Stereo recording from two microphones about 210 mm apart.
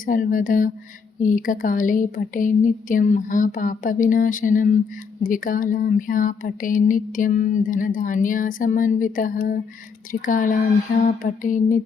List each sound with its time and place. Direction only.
0.0 s speech: 40° left (ahead or behind)